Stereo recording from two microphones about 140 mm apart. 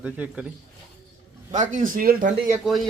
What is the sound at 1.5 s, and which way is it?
Speech, 65° right (ahead or behind).